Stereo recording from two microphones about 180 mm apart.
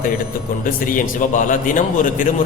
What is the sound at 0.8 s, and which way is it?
A man's voice, 50° left (ahead or behind).